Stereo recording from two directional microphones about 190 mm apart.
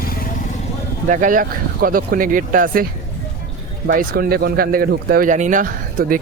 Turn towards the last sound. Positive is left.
turn(degrees=-50)  # may be behind; listen again after turning